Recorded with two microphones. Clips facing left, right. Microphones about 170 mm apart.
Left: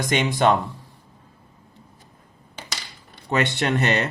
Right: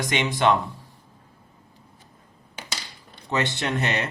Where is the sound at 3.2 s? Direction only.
60° left (ahead or behind).